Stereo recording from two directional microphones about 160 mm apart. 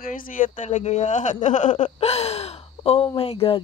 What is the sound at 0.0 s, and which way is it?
Speech, 60° left (ahead or behind).